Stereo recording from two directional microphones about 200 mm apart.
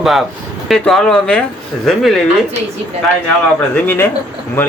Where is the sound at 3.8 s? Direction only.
10° left (ahead or behind).